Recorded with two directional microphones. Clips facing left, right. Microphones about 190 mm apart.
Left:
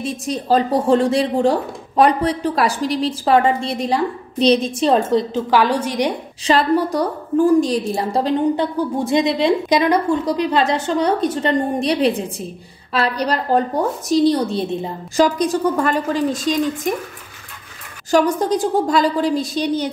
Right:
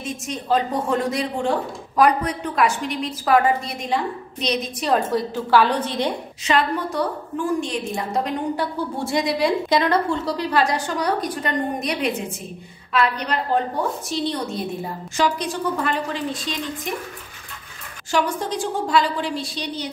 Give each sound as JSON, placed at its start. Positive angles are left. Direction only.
{"t": 0.0, "sound": "a woman's voice", "side_deg": 35}
{"t": 6.4, "sound": "a woman's voice", "side_deg": 35}
{"t": 8.7, "sound": "a woman's voice", "side_deg": 15}
{"t": 15.1, "sound": "a woman's voice", "side_deg": 40}
{"t": 18.1, "sound": "a woman's voice", "side_deg": 40}